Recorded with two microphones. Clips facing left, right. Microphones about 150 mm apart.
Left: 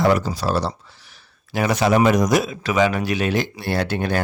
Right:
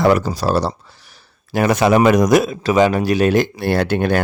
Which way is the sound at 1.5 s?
50° right (ahead or behind).